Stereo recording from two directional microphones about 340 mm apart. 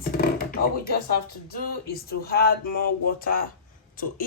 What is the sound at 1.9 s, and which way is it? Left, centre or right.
Speech, left.